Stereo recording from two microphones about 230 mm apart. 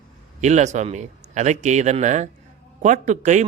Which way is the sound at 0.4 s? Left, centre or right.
Right.